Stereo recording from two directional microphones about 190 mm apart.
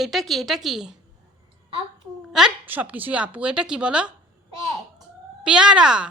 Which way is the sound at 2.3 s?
5° right (ahead or behind).